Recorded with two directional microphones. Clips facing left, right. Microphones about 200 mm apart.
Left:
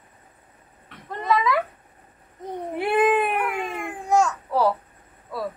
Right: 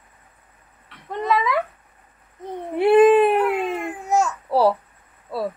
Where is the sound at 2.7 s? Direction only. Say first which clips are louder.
Right 8 dB; 25° right (ahead or behind).